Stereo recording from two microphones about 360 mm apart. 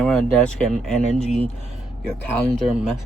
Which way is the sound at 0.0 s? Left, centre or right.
Centre.